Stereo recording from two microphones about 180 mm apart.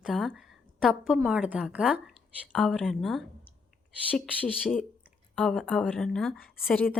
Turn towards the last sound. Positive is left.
turn(degrees=10)  # may be behind; listen again after turning